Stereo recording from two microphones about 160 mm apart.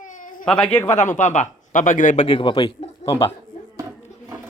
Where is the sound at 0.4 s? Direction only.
5° left (ahead or behind).